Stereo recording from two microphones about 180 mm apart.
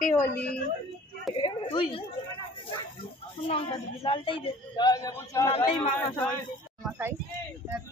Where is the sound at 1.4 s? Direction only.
30° left (ahead or behind).